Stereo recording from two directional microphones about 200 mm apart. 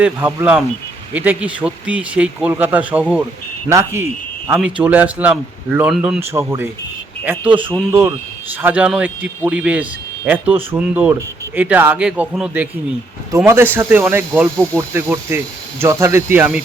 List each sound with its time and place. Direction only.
0.0 s a man's voice: 10° right (ahead or behind)
7.5 s speech: 25° right (ahead or behind)
8.6 s a man's voice: 5° right (ahead or behind)